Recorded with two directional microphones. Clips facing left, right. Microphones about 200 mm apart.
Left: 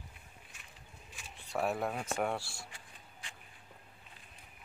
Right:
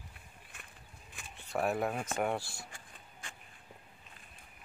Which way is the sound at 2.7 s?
50° right (ahead or behind).